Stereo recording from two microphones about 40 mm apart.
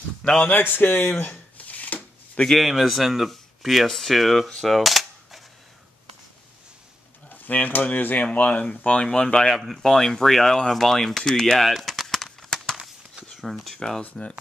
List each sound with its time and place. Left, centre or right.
0.2 s speech: centre
0.5 s shuffling cards: left
2.5 s speech: centre
4.6 s cap gun: centre
7.2 s speech: left
8.4 s speech: left; by 11.6 s centre
11.6 s a sound: centre
13.3 s speech: centre